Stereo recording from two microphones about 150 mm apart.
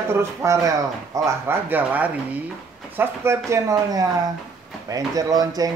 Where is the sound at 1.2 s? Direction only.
15° right (ahead or behind).